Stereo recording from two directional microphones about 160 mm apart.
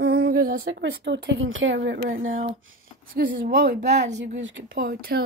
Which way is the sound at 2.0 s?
60° right (ahead or behind).